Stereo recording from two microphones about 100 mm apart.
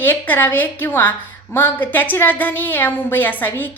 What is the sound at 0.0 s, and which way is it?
A woman's voice, 20° left (ahead or behind).